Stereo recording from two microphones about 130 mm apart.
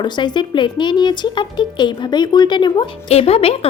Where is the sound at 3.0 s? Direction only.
50° left (ahead or behind).